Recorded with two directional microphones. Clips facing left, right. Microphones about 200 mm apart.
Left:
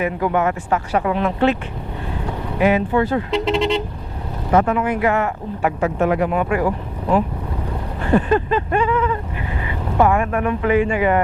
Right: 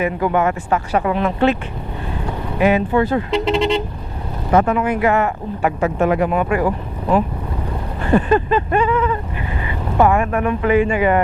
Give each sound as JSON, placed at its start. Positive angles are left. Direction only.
{"t": 0.0, "sound": "speech", "side_deg": -15}
{"t": 2.6, "sound": "speech", "side_deg": -15}